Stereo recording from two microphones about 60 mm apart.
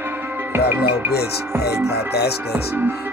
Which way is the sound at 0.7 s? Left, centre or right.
Right.